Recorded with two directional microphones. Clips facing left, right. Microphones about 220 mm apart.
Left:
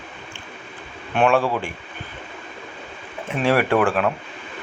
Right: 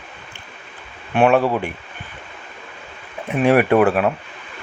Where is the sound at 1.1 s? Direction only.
15° right (ahead or behind).